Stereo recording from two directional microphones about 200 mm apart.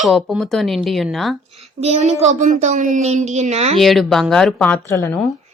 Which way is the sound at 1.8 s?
35° right (ahead or behind).